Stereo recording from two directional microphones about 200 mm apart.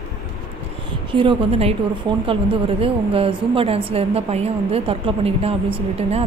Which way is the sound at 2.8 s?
30° right (ahead or behind).